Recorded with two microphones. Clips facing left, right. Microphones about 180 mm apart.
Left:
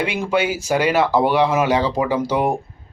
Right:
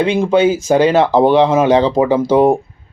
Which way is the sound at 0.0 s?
30° right (ahead or behind).